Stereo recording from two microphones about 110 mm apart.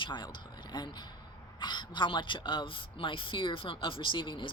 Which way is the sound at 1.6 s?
45° left (ahead or behind).